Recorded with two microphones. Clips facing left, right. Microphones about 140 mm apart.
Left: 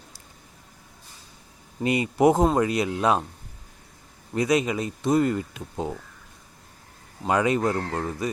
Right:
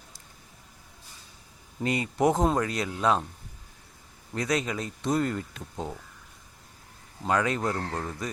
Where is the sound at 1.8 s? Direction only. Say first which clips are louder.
Left 5 dB; 10° left (ahead or behind).